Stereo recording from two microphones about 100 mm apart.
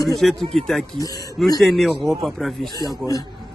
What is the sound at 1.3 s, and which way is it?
A man's voice, centre (ahead or behind).